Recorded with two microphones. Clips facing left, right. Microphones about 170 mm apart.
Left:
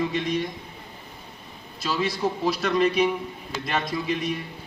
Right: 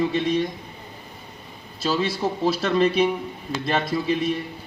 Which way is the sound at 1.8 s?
30° right (ahead or behind).